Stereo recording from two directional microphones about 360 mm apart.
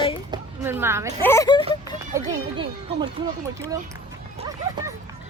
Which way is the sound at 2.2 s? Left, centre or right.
Centre.